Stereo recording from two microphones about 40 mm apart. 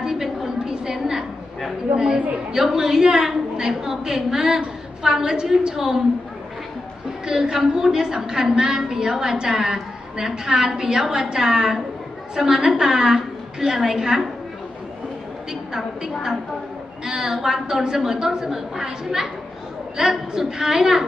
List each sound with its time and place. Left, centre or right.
0.0 s a sound: centre
2.0 s a woman's voice: centre
7.3 s a woman's voice: centre
17.0 s a woman's voice: centre